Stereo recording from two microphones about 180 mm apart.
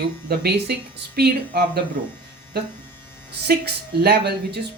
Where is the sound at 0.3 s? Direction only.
65° right (ahead or behind).